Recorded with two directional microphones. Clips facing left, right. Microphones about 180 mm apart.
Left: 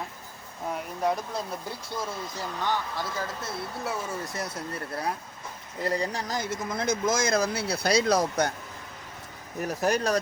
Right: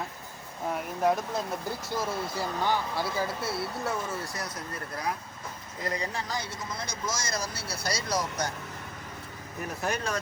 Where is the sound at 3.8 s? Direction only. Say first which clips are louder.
Left 2 dB; 5° left (ahead or behind).